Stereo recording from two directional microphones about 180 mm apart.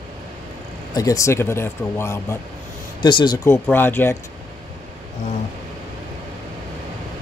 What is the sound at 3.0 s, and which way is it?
Speech, 25° left (ahead or behind).